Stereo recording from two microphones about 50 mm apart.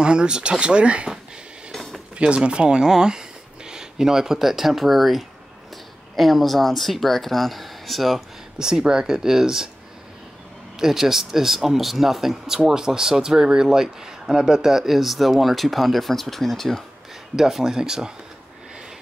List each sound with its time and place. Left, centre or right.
0.0 s speech: centre
1.7 s a sound: centre
2.1 s speech: right; by 8.2 s centre
8.5 s speech: centre
10.8 s speech: centre
17.4 s speech: centre